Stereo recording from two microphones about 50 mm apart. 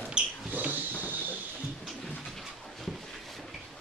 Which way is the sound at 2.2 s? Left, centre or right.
Centre.